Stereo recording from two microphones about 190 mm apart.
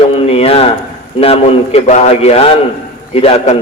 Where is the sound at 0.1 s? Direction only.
30° left (ahead or behind).